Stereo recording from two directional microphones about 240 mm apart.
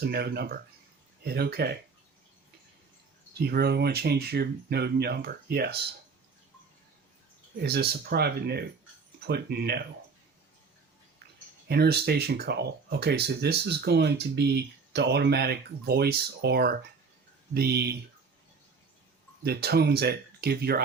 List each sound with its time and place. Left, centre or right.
0.0 s speech: right
3.3 s speech: right
7.5 s speech: right
11.7 s speech: right
19.4 s speech: right